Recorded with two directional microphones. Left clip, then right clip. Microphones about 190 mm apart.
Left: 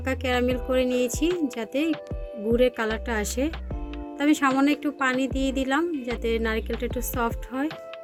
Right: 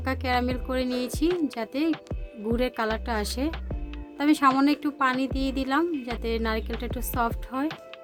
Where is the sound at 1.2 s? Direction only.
5° left (ahead or behind).